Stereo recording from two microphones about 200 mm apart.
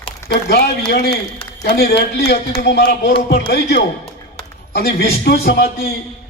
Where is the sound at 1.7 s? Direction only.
55° left (ahead or behind).